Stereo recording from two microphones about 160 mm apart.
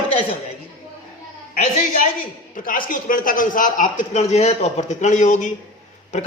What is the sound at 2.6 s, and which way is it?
A man's voice, 60° left (ahead or behind).